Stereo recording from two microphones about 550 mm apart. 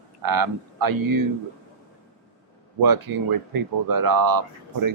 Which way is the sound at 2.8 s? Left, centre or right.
Right.